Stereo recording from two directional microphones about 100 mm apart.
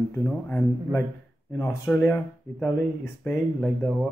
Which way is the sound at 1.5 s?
25° left (ahead or behind).